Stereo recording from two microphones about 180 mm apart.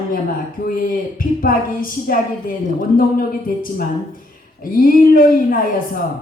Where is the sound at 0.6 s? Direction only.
50° left (ahead or behind).